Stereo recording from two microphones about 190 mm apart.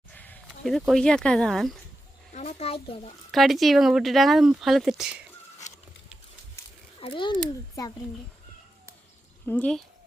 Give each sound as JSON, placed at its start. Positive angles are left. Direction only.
{"t": 0.1, "sound": "speech", "side_deg": 5}
{"t": 2.3, "sound": "speech", "side_deg": 35}
{"t": 3.3, "sound": "speech", "side_deg": 0}
{"t": 7.0, "sound": "a child's voice", "side_deg": 25}
{"t": 9.5, "sound": "speech", "side_deg": 5}